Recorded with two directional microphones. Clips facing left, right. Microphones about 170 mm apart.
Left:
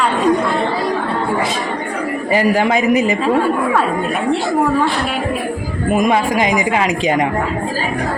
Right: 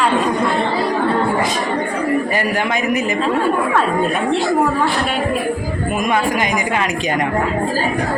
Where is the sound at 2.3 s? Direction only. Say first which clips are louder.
Left 5 dB; 30° left (ahead or behind).